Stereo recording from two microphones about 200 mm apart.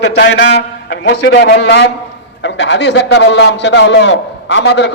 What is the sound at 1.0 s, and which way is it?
A man's voice, 60° left (ahead or behind).